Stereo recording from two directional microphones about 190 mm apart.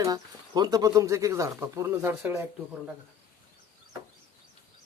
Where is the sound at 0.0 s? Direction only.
20° right (ahead or behind).